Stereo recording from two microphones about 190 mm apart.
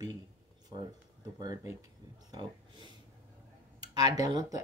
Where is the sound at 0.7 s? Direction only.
25° right (ahead or behind).